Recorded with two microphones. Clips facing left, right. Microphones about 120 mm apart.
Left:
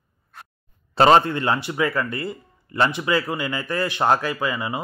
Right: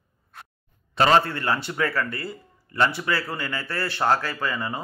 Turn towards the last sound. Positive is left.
turn(degrees=15)  # may be behind; listen again after turning